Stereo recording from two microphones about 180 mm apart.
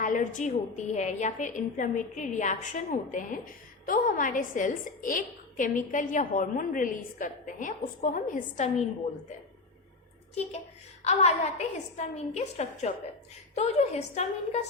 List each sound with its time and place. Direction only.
0.0 s a woman's voice: 45° left (ahead or behind)
11.0 s a woman's voice: 35° left (ahead or behind)